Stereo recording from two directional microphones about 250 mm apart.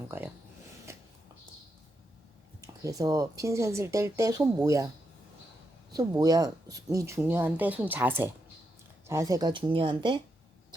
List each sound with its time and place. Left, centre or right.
2.8 s speech: centre
5.9 s speech: centre